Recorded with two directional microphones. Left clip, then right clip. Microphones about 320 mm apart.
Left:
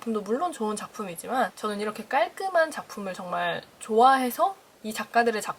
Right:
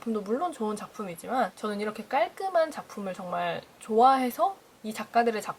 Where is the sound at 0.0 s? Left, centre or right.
Centre.